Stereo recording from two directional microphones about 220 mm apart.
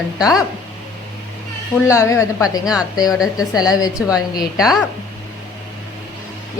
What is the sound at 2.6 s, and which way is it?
Speech, 5° right (ahead or behind).